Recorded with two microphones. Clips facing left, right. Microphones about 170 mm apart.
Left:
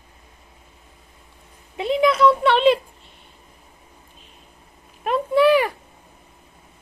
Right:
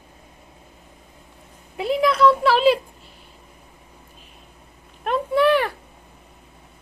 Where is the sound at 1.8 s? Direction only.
Centre (ahead or behind).